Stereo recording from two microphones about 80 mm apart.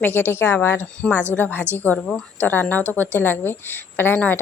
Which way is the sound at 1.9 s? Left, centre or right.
Centre.